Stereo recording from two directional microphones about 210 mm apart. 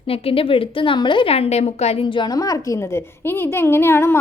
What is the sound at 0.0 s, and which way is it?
A woman's voice, 25° left (ahead or behind).